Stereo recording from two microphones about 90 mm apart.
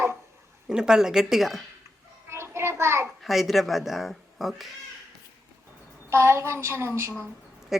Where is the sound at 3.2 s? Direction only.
Centre (ahead or behind).